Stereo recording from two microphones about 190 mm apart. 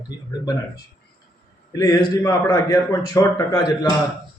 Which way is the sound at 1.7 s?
20° left (ahead or behind).